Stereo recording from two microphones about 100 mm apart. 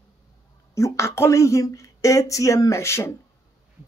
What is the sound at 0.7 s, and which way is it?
Speech, 30° left (ahead or behind).